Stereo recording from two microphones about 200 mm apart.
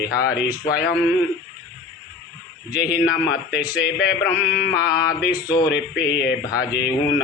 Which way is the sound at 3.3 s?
5° right (ahead or behind).